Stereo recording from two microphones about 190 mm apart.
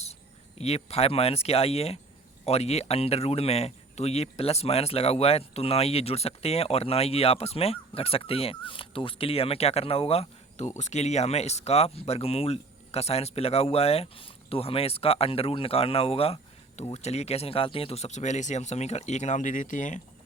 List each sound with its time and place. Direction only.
0.6 s speech: 35° left (ahead or behind)